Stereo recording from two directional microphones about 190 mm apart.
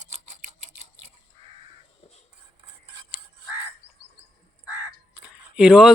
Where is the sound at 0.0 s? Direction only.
40° right (ahead or behind).